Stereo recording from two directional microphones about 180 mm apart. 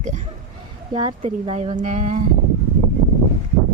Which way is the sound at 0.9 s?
30° right (ahead or behind).